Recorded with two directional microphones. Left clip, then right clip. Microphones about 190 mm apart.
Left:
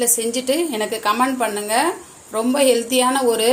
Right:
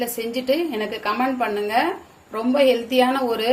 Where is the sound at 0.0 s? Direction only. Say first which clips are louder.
Left 4 dB; 20° left (ahead or behind).